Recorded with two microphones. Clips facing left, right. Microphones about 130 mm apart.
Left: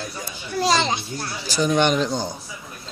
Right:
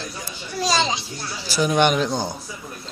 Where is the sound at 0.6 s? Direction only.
60° left (ahead or behind).